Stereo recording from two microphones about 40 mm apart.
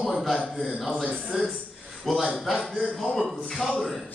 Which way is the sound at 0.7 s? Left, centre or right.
Centre.